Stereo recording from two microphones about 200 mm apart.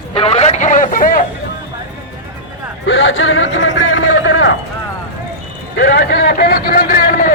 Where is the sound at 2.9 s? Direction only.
70° left (ahead or behind).